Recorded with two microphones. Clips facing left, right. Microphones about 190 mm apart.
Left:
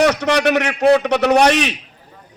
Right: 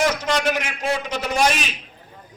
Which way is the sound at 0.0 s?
70° left (ahead or behind).